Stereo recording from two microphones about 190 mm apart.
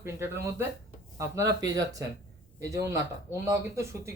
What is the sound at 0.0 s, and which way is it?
A man's voice, 10° right (ahead or behind).